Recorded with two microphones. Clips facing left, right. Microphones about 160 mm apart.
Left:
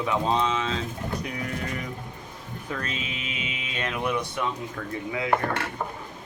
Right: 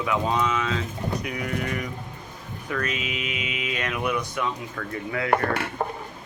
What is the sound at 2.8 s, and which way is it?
Speech, 30° left (ahead or behind).